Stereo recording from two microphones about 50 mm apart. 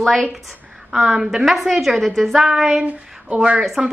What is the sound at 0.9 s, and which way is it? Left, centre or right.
A woman's voice, centre.